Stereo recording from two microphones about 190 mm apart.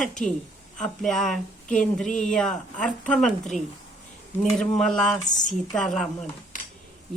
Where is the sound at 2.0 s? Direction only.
40° left (ahead or behind).